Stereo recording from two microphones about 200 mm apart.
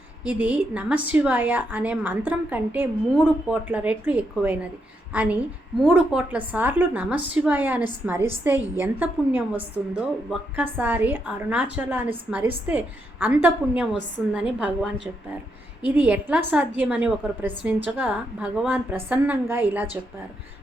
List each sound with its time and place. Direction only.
0.3 s a woman's voice: 5° right (ahead or behind)